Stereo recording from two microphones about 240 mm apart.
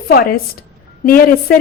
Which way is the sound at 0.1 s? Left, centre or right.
Left.